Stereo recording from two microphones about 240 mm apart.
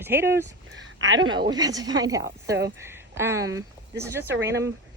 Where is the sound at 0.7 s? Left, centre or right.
Right.